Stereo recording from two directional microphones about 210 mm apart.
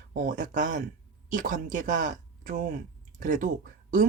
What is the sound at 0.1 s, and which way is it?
Speech, 40° right (ahead or behind).